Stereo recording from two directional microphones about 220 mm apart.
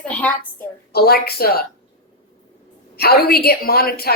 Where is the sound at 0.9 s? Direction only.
45° left (ahead or behind).